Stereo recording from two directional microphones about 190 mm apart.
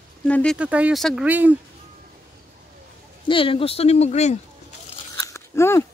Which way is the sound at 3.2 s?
25° left (ahead or behind).